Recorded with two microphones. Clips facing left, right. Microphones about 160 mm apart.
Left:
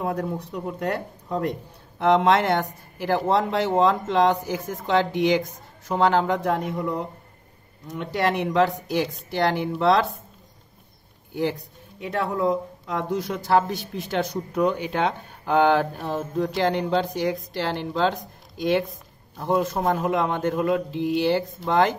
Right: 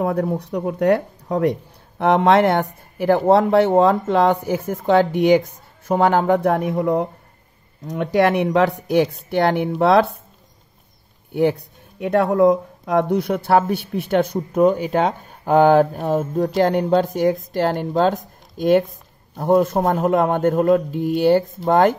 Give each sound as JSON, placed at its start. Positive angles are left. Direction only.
{"t": 0.0, "sound": "speech", "side_deg": -60}
{"t": 2.0, "sound": "speech", "side_deg": -55}
{"t": 12.0, "sound": "speech", "side_deg": -70}